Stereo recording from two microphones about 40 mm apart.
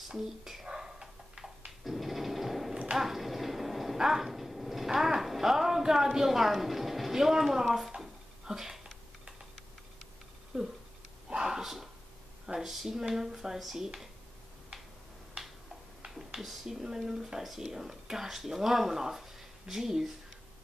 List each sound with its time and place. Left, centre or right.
0.7 s dog: centre
1.9 s sewing machine: centre
3.0 s a sound: centre
10.5 s a sound: right; by 11.9 s centre
12.5 s speech: centre
16.1 s speech: centre